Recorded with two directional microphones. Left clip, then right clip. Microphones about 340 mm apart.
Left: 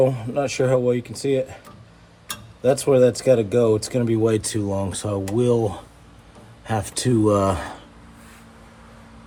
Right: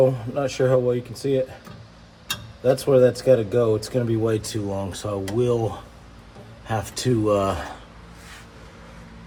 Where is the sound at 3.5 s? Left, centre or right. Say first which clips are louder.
Left 2 dB; left.